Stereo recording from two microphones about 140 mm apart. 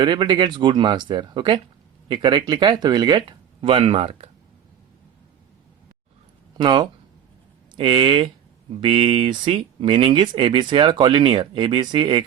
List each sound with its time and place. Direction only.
0.0 s speech: 35° right (ahead or behind)
6.6 s speech: 35° right (ahead or behind)